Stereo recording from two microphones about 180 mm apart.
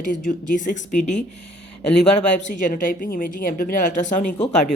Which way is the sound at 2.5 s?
45° left (ahead or behind).